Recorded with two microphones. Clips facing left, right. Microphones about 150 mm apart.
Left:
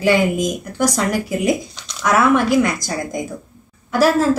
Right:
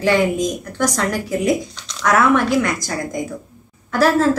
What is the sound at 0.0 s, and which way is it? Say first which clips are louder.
A woman's voice: left 1 dB; 10° left (ahead or behind).